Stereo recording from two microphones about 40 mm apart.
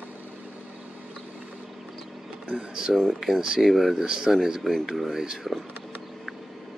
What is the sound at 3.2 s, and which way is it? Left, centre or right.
Speech, centre.